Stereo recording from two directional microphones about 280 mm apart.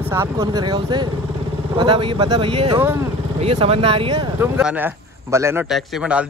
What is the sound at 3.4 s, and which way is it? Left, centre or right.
Speech, right.